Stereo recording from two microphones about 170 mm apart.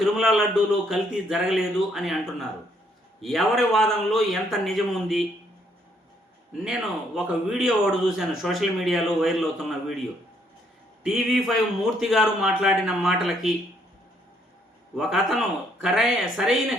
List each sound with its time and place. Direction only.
0.0 s a man's voice: centre (ahead or behind)
6.7 s a man's voice: 5° right (ahead or behind)
11.0 s a man's voice: centre (ahead or behind)
14.9 s a man's voice: centre (ahead or behind)